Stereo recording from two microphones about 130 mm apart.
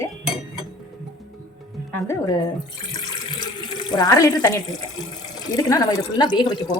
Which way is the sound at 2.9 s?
30° left (ahead or behind).